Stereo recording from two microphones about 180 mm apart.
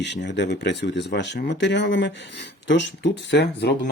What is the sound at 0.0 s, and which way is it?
Speech, 75° left (ahead or behind).